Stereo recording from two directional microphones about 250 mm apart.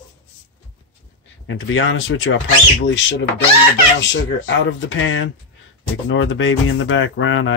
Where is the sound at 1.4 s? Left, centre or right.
Left.